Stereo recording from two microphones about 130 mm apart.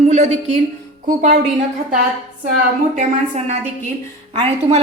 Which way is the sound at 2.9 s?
60° right (ahead or behind).